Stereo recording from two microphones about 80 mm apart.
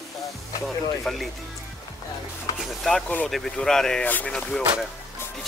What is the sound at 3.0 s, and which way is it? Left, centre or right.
Speech, left.